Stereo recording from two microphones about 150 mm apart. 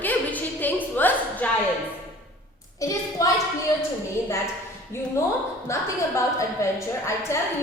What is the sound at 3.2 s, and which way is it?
Speech, 20° left (ahead or behind).